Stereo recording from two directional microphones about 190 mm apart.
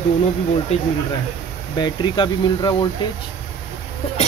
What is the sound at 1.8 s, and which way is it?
Speech, 25° left (ahead or behind).